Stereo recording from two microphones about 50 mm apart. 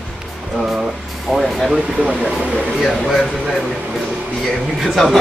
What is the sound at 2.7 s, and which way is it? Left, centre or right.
Speech, centre.